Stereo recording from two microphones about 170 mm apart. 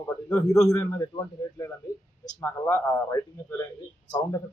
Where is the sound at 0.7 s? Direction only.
20° left (ahead or behind).